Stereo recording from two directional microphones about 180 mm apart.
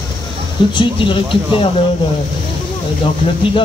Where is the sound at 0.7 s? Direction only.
30° left (ahead or behind).